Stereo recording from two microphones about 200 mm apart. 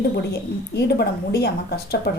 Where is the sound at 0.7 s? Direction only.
55° left (ahead or behind).